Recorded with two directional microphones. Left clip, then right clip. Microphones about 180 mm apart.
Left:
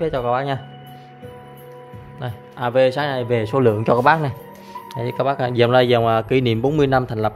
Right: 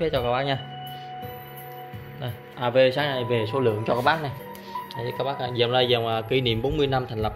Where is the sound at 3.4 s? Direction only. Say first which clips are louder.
Left 6 dB; 45° left (ahead or behind).